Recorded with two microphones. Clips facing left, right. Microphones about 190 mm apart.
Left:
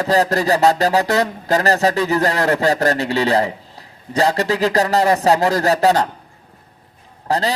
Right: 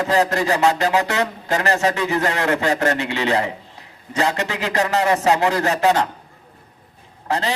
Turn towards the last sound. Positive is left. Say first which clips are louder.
# left 3 dB
turn(degrees=35)  # may be behind; listen again after turning